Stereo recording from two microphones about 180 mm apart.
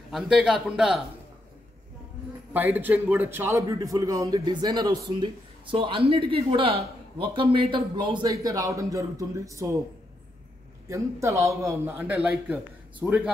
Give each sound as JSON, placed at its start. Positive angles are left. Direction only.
{"t": 0.1, "sound": "a man's voice", "side_deg": 0}
{"t": 2.5, "sound": "a man's voice", "side_deg": -10}
{"t": 10.9, "sound": "a man's voice", "side_deg": -15}